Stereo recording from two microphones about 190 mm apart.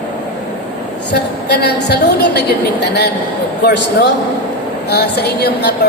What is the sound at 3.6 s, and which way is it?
A woman's voice, 65° left (ahead or behind).